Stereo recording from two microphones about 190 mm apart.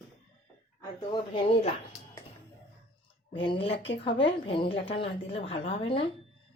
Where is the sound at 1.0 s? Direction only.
30° left (ahead or behind).